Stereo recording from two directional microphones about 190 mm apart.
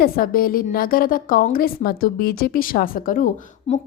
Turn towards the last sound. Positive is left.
turn(degrees=40)  # may be behind; listen again after turning